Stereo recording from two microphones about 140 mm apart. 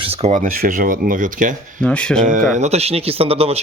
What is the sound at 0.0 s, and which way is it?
Speech, 45° right (ahead or behind).